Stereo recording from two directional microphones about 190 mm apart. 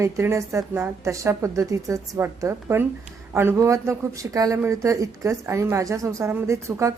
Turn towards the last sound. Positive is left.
turn(degrees=-15)  # may be behind; listen again after turning